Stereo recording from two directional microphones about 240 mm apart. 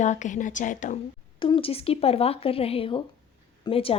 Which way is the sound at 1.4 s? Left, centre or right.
Left.